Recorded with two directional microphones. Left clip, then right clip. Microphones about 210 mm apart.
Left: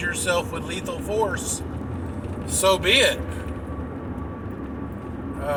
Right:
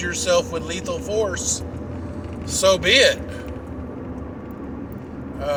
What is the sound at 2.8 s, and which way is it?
Speech, 20° right (ahead or behind).